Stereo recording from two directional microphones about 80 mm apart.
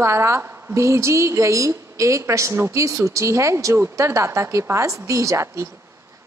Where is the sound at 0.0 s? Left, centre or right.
Right.